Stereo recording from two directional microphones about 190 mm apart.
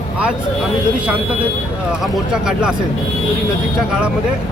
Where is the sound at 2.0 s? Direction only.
5° right (ahead or behind).